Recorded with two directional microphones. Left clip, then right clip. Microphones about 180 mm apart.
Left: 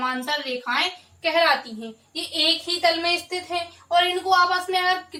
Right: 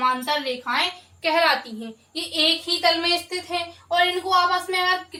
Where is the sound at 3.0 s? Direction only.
15° right (ahead or behind).